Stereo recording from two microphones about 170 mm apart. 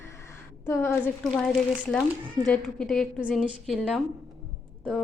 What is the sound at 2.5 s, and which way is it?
Speech, 5° left (ahead or behind).